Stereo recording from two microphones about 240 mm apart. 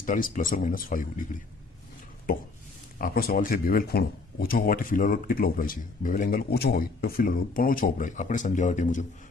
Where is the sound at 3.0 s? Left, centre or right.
Left.